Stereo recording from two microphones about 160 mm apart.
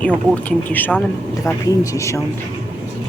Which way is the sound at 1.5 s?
20° left (ahead or behind).